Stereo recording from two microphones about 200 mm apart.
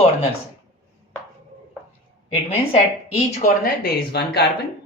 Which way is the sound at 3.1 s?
40° left (ahead or behind).